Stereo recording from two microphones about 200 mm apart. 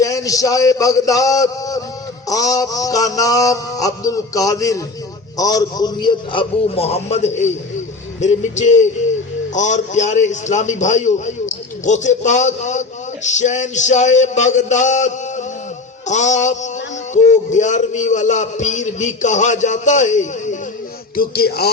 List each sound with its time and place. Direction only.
0.0 s music: 15° left (ahead or behind)
5.4 s a man's voice: 20° left (ahead or behind); by 20.6 s 35° left (ahead or behind)
21.2 s music: 50° left (ahead or behind)